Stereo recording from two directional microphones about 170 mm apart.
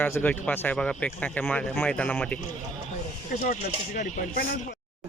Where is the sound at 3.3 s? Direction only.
45° left (ahead or behind).